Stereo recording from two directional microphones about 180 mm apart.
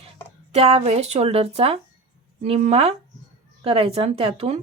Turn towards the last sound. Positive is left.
turn(degrees=-35)  # may be behind; listen again after turning